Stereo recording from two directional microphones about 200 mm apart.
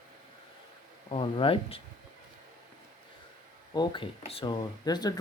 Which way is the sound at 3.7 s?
25° left (ahead or behind).